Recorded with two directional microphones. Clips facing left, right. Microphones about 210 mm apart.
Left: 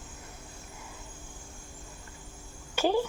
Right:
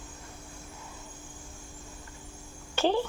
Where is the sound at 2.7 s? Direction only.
10° left (ahead or behind).